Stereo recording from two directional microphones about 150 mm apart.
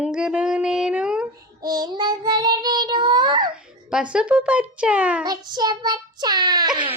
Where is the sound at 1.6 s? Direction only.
25° right (ahead or behind).